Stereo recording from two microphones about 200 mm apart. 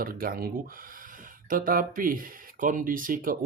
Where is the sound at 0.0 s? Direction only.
45° right (ahead or behind).